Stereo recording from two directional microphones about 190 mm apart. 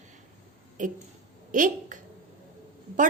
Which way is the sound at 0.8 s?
40° right (ahead or behind).